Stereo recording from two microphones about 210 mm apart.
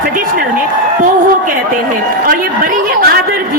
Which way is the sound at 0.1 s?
40° right (ahead or behind).